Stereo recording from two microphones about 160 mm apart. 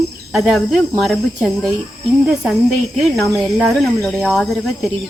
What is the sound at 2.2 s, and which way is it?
Speech, 5° right (ahead or behind).